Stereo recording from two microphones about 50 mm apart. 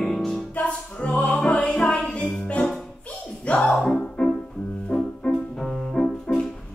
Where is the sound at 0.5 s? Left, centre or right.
Left.